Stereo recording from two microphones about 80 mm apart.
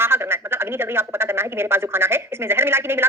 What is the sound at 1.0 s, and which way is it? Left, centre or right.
Speech, right.